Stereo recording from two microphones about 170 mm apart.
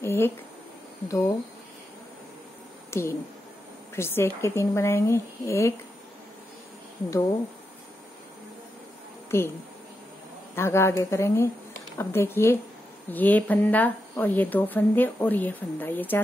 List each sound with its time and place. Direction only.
0.0 s a sound: 15° left (ahead or behind)
1.0 s speech: 20° left (ahead or behind)
2.9 s a woman's voice: 15° left (ahead or behind)
9.3 s speech: 15° left (ahead or behind)
10.5 s speech: 15° left (ahead or behind)